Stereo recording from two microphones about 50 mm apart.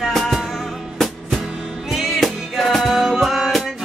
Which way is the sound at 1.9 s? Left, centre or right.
Centre.